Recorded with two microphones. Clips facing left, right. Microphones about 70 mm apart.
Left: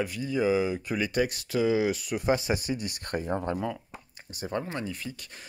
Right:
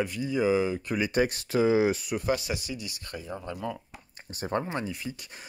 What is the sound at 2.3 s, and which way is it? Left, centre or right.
Speech, left.